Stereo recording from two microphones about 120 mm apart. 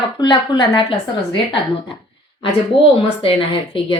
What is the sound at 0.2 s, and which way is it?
Speech, 35° left (ahead or behind).